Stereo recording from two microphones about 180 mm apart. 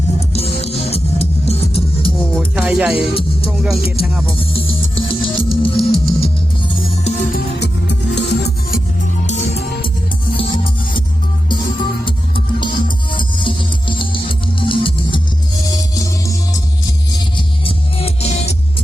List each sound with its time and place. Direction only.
0.2 s music: 35° left (ahead or behind)
2.1 s music: 5° left (ahead or behind)
3.8 s music: 30° left (ahead or behind)
7.3 s music: 70° left (ahead or behind)
9.2 s music: 40° left (ahead or behind)
12.0 s music: 25° left (ahead or behind)
16.0 s music: 20° left (ahead or behind)
17.6 s music: 30° left (ahead or behind)